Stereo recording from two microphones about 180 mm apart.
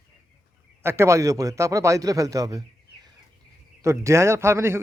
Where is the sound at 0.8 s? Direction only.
15° right (ahead or behind).